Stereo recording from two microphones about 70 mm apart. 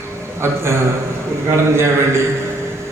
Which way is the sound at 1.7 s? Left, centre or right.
Right.